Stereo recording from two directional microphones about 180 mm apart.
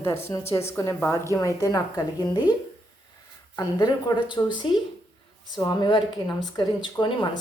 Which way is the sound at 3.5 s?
20° left (ahead or behind).